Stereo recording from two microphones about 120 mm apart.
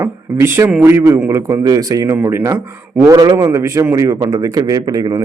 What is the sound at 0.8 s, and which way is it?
A man's voice, 20° right (ahead or behind).